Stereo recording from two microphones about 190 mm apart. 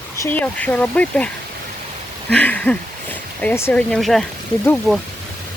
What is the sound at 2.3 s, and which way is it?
Speech, 5° left (ahead or behind).